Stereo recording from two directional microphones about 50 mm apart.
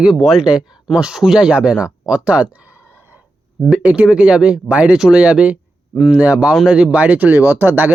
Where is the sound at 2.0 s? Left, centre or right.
Right.